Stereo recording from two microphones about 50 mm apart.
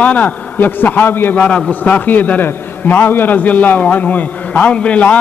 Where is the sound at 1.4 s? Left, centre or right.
Left.